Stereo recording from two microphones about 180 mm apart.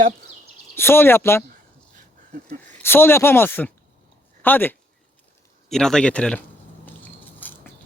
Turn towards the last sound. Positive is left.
turn(degrees=10)  # may be behind; listen again after turning